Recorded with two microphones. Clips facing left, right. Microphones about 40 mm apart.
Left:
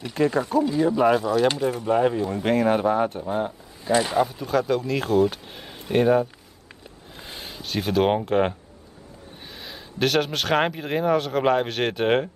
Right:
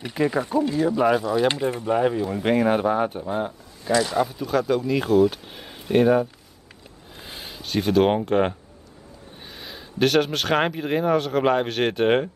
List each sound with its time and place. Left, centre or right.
0.0 s speech: centre
3.9 s speech: left
4.5 s speech: centre
7.2 s a sound: centre
9.5 s speech: centre